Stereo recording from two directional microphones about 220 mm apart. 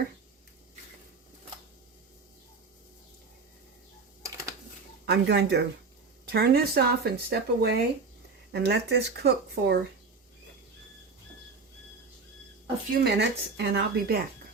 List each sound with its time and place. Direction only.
5.0 s speech: 50° right (ahead or behind)
13.0 s speech: 50° right (ahead or behind)